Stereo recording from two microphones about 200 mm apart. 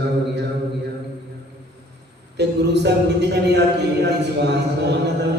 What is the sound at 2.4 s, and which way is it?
A man's voice, 55° right (ahead or behind).